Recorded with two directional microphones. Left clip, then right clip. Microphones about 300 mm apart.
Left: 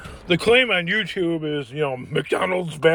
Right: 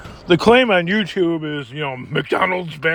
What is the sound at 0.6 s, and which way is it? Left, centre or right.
Speech, right.